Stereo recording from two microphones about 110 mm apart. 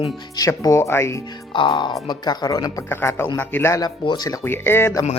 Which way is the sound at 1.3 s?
50° left (ahead or behind).